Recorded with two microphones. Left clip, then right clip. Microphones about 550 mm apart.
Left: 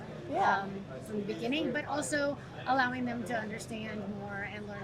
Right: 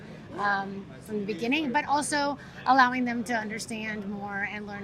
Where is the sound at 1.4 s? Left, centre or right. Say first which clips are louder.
Right 7 dB; right.